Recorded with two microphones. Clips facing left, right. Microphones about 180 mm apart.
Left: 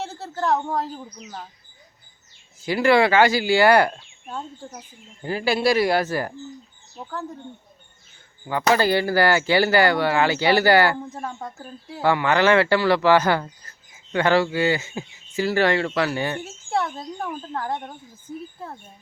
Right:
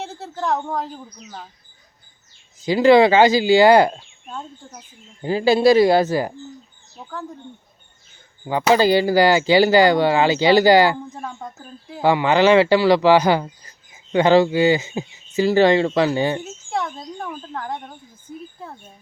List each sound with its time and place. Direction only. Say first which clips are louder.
0.0 s speech: even; centre (ahead or behind)
2.6 s speech: right 5 dB; 20° right (ahead or behind)
4.3 s speech: left 1 dB; 5° left (ahead or behind)
5.2 s speech: right 6 dB; 20° right (ahead or behind)
8.7 s speech: right 5 dB; 15° right (ahead or behind)
11.1 s speech: even; centre (ahead or behind)
12.0 s speech: right 3 dB; 15° right (ahead or behind)
16.4 s speech: left 1 dB; 5° left (ahead or behind)